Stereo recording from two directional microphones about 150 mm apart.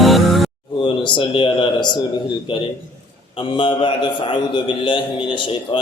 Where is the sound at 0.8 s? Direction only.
30° left (ahead or behind).